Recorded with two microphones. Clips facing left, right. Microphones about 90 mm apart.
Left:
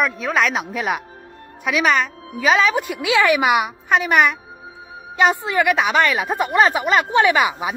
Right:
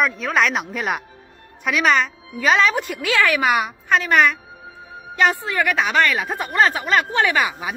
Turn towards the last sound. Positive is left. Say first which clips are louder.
# left 3 dB
turn(degrees=15)  # may be behind; listen again after turning